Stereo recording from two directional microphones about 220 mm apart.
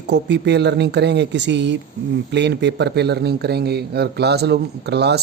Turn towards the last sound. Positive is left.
turn(degrees=-50)  # may be behind; listen again after turning